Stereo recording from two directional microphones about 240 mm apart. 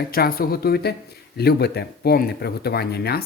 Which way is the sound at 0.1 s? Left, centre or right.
Left.